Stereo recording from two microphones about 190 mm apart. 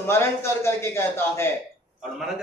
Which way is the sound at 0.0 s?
15° left (ahead or behind).